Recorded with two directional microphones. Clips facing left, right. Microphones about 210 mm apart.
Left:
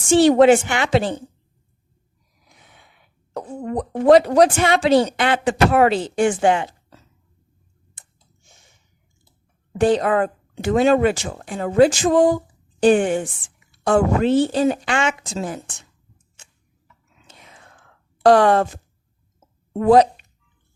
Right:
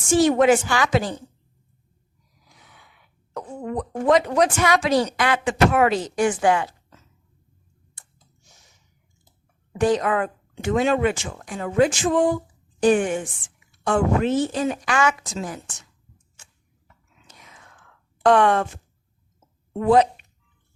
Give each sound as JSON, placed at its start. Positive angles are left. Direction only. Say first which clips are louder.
{"t": 0.1, "sound": "speech", "louder": "left 4 dB", "side_deg": 30}
{"t": 2.4, "sound": "cough", "louder": "left 1 dB", "side_deg": 25}
{"t": 4.0, "sound": "speech", "louder": "left 6 dB", "side_deg": 35}
{"t": 8.0, "sound": "clicking", "louder": "left 1 dB", "side_deg": 20}
{"t": 8.4, "sound": "a sound", "louder": "left 3 dB", "side_deg": 25}
{"t": 9.7, "sound": "speech", "louder": "left 3 dB", "side_deg": 30}
{"t": 17.2, "sound": "whispering", "louder": "left 2 dB", "side_deg": 30}
{"t": 19.8, "sound": "speech", "louder": "left 4 dB", "side_deg": 40}